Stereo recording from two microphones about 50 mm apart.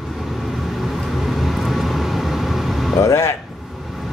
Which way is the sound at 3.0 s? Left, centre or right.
Left.